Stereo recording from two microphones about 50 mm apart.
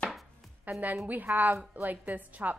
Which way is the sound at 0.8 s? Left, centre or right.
Right.